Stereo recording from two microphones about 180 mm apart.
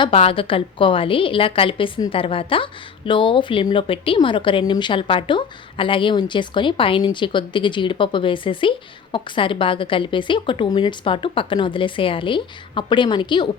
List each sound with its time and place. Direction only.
0.0 s a woman's voice: 30° left (ahead or behind)